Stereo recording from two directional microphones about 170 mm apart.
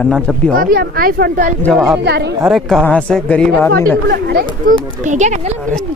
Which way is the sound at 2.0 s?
85° right.